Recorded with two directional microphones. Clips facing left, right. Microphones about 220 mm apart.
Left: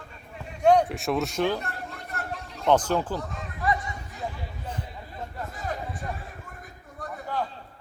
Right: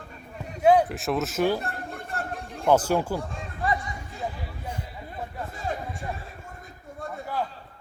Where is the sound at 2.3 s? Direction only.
50° right (ahead or behind).